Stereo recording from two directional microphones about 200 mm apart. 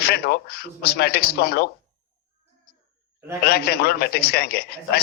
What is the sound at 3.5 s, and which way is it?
A man's voice, 50° left (ahead or behind).